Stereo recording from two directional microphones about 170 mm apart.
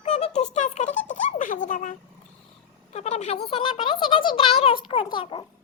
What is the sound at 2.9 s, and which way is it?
A child's voice, 40° left (ahead or behind).